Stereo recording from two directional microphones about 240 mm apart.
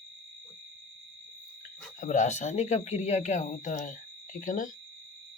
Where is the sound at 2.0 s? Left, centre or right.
Left.